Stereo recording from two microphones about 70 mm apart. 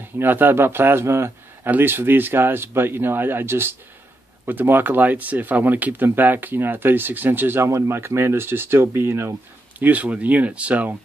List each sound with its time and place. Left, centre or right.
0.0 s speech: right
7.6 s speech: right
9.8 s speech: right